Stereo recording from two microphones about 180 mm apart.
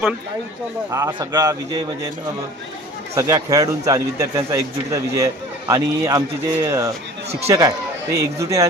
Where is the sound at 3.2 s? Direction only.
20° right (ahead or behind).